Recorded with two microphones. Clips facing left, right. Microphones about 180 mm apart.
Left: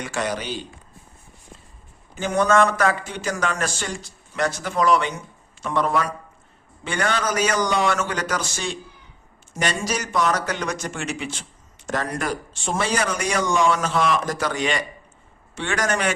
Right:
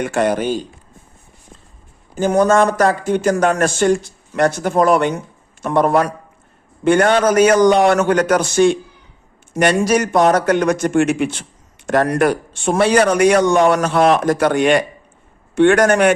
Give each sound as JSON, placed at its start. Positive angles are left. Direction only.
{"t": 0.0, "sound": "speech", "side_deg": -55}
{"t": 2.1, "sound": "speech", "side_deg": -40}
{"t": 11.9, "sound": "speech", "side_deg": -65}